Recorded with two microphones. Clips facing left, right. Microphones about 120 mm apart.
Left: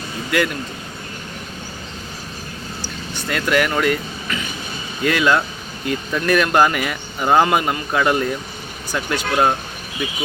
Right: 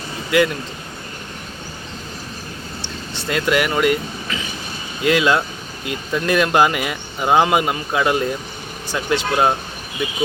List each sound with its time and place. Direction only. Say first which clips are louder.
0.3 s speech: right 4 dB; 20° right (ahead or behind)
3.2 s speech: even; 20° right (ahead or behind)
5.0 s speech: right 1 dB; 20° right (ahead or behind)